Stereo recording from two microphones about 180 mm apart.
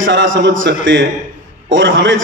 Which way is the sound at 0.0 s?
90° right.